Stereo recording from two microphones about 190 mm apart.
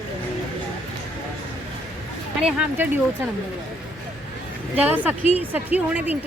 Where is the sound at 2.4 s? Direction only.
5° right (ahead or behind).